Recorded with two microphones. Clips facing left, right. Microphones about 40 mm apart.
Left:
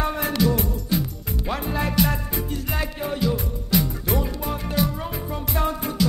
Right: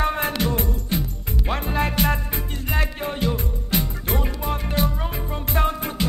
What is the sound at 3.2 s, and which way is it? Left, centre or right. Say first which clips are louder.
Music: left 1 dB; right.